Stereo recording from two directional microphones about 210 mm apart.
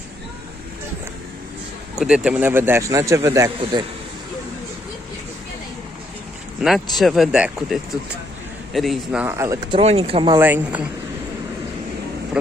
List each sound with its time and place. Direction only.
2.0 s a man's voice: 5° right (ahead or behind); by 3.8 s 25° right (ahead or behind)
6.6 s speech: centre (ahead or behind)
9.7 s speech: 30° right (ahead or behind)
10.3 s a man's voice: 10° right (ahead or behind)